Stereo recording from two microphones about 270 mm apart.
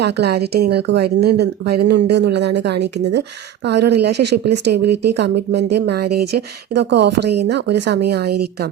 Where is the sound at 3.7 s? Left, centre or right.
Right.